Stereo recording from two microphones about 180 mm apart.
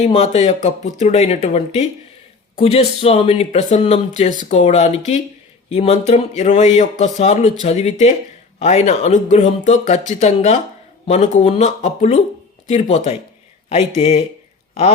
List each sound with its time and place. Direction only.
0.1 s speech: 40° left (ahead or behind)